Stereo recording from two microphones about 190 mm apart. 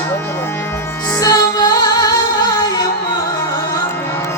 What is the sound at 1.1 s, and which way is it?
Music, 15° left (ahead or behind).